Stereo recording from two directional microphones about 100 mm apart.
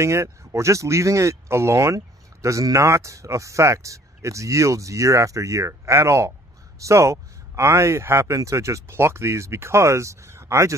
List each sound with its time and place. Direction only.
0.0 s speech: 30° right (ahead or behind)